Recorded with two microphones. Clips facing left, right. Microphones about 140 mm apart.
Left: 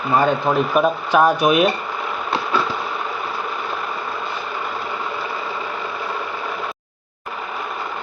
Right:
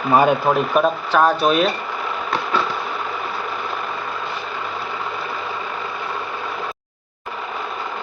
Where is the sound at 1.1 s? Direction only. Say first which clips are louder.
Left 1 dB; 15° left (ahead or behind).